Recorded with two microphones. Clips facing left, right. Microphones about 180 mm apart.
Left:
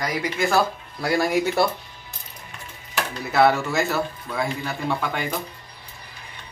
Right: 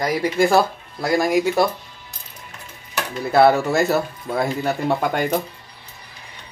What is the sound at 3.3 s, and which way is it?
Speech, 35° right (ahead or behind).